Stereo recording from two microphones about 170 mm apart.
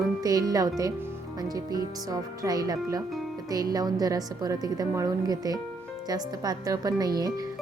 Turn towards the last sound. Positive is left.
turn(degrees=-20)  # may be behind; listen again after turning